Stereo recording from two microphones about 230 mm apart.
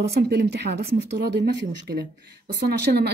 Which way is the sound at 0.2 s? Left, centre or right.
Right.